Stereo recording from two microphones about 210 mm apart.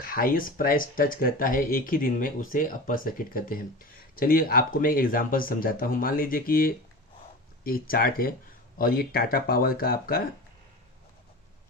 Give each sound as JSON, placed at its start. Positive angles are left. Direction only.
{"t": 0.0, "sound": "speech", "side_deg": 40}